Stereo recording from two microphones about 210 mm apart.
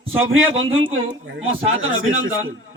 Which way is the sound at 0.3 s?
70° right (ahead or behind).